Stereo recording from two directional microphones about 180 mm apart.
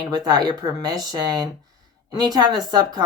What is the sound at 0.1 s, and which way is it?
Speech, 20° right (ahead or behind).